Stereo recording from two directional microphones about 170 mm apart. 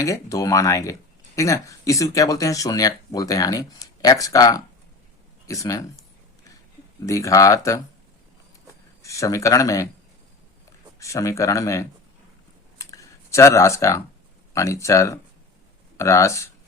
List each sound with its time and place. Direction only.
0.0 s speech: 20° left (ahead or behind)
7.0 s speech: 20° left (ahead or behind)
9.0 s speech: 20° left (ahead or behind)
11.0 s speech: 20° left (ahead or behind)
12.8 s a sound: 20° left (ahead or behind)
14.5 s speech: 20° left (ahead or behind)